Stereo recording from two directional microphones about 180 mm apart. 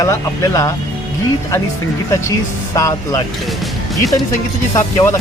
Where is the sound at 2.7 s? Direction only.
20° left (ahead or behind).